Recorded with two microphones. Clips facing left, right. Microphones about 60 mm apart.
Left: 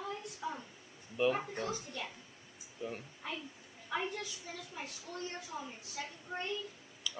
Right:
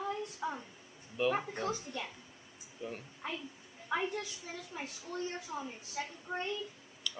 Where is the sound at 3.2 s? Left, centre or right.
Right.